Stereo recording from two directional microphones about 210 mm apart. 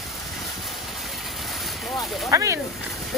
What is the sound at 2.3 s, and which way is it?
Speech, 15° right (ahead or behind).